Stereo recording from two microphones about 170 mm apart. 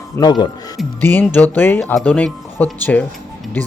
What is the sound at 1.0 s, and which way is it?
Speech, 10° left (ahead or behind).